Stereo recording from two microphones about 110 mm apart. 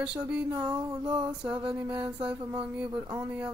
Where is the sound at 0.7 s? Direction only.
40° right (ahead or behind).